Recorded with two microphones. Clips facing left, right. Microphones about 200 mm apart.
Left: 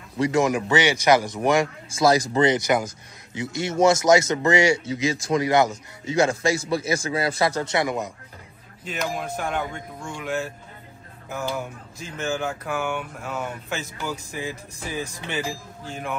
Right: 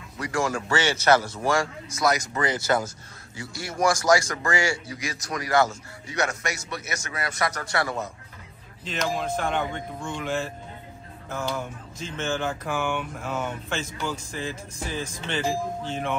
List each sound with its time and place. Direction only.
0.2 s speech: 20° left (ahead or behind)